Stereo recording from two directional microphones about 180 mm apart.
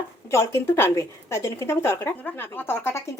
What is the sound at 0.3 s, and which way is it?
A woman's voice, 15° left (ahead or behind).